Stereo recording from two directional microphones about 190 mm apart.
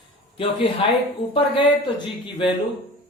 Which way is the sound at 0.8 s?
30° left (ahead or behind).